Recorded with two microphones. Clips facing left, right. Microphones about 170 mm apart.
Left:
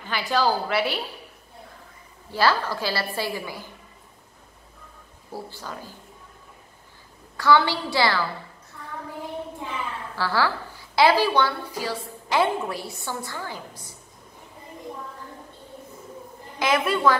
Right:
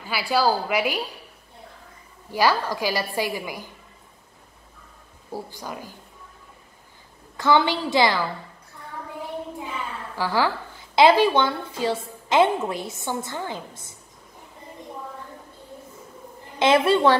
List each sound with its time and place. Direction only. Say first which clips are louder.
0.0 s a woman's voice: right 1 dB; 10° right (ahead or behind)
2.3 s a woman's voice: right 1 dB; 15° right (ahead or behind)
5.3 s a woman's voice: right 2 dB; 15° right (ahead or behind)
7.3 s a woman's voice: even; 20° right (ahead or behind)
10.1 s a woman's voice: right 1 dB; 15° right (ahead or behind)
16.5 s a woman's voice: right 5 dB; 30° right (ahead or behind)